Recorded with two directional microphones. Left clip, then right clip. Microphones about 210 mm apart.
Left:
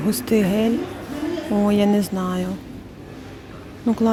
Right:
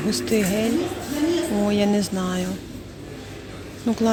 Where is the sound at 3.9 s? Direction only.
10° left (ahead or behind).